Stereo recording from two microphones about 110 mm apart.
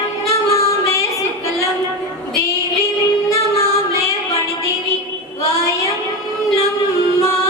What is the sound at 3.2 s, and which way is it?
Female singing, 25° left (ahead or behind).